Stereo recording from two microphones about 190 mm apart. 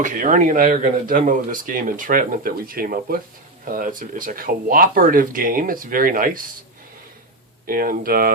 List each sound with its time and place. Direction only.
0.0 s speech: 45° right (ahead or behind)
7.7 s speech: 50° right (ahead or behind)